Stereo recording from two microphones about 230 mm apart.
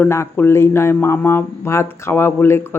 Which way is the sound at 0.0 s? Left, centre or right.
Centre.